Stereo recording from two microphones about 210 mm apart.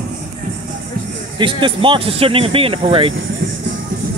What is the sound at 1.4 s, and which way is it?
Speech, 25° right (ahead or behind).